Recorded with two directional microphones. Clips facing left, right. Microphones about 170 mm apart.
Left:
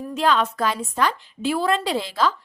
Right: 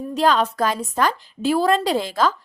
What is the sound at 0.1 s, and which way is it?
Speech, 40° right (ahead or behind).